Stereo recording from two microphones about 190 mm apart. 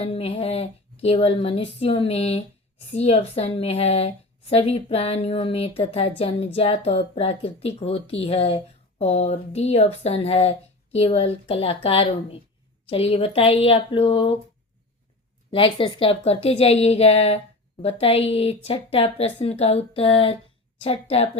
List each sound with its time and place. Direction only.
0.0 s a woman's voice: 30° left (ahead or behind)
15.5 s a woman's voice: 25° left (ahead or behind)